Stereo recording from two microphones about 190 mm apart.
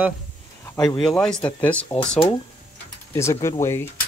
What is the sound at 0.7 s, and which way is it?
Speech, 20° left (ahead or behind).